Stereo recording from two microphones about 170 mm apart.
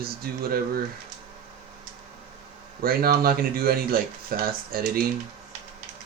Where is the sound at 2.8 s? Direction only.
60° right (ahead or behind).